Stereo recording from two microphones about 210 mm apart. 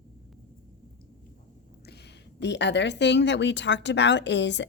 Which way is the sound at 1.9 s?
50° left (ahead or behind).